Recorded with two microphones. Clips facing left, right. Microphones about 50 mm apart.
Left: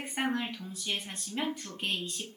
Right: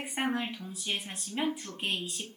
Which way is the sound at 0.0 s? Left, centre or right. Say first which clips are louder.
Even; centre.